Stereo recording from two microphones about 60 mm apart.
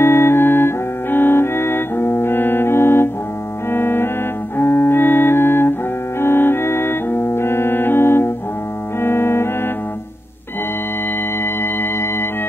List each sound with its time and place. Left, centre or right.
0.0 s music: left
9.0 s organ: left
11.4 s music: left